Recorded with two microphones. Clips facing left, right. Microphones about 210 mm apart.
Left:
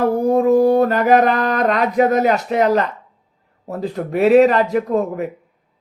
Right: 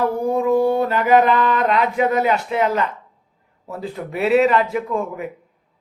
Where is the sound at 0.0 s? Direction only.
45° left (ahead or behind).